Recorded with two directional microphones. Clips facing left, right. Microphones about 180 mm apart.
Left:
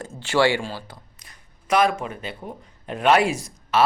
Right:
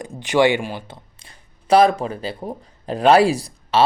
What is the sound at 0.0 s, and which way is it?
Speech, 15° right (ahead or behind).